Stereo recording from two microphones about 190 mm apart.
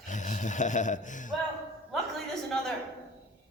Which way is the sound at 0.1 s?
40° left (ahead or behind).